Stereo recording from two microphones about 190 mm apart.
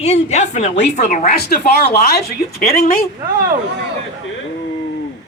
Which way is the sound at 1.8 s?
60° left (ahead or behind).